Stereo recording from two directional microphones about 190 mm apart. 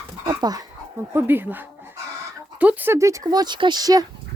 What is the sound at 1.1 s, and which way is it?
Speech, 10° right (ahead or behind).